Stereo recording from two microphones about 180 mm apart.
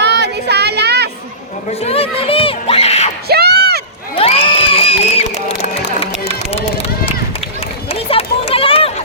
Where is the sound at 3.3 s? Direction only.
65° right (ahead or behind).